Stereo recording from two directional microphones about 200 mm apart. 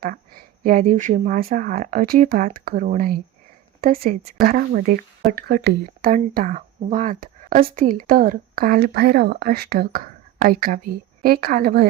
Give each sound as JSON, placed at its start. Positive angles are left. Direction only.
{"t": 0.0, "sound": "speech", "side_deg": -45}